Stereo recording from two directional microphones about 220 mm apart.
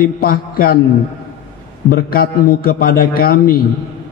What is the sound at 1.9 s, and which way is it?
Mantra, 40° left (ahead or behind).